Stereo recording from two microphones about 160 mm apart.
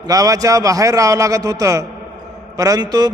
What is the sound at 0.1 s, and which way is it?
A man's voice, 20° right (ahead or behind).